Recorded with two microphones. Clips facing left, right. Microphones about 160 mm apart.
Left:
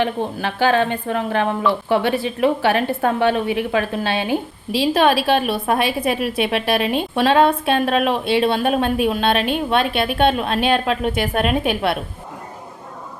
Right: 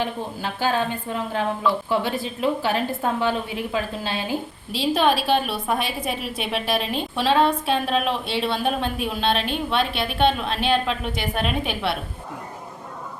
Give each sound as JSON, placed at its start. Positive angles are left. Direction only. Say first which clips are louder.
{"t": 0.0, "sound": "a woman's voice", "louder": "left 6 dB", "side_deg": 70}